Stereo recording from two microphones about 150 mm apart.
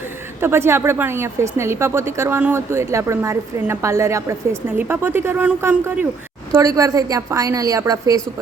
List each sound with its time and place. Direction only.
0.3 s a woman's voice: 15° right (ahead or behind)
6.5 s a woman's voice: 20° right (ahead or behind)